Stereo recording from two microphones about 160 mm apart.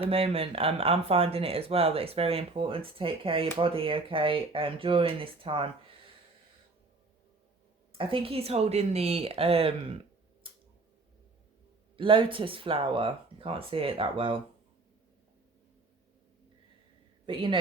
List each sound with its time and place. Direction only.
0.1 s speech: 35° right (ahead or behind)
7.9 s speech: 35° right (ahead or behind)
11.9 s speech: 30° right (ahead or behind)
17.2 s speech: 30° right (ahead or behind)